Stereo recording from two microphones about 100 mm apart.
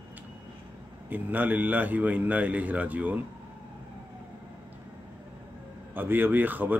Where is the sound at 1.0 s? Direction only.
15° right (ahead or behind).